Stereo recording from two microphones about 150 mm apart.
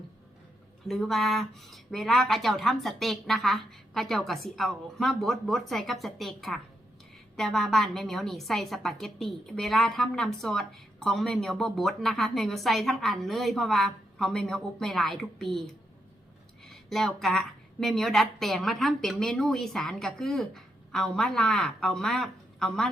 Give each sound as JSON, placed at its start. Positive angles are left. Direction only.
{"t": 0.9, "sound": "a woman's voice", "side_deg": 0}